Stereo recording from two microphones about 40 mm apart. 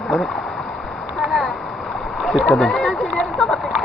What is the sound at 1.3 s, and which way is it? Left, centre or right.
Rowboat, centre.